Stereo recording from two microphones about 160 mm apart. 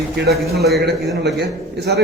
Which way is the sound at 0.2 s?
85° right.